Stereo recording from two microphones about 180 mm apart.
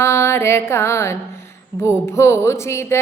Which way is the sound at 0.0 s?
15° left (ahead or behind).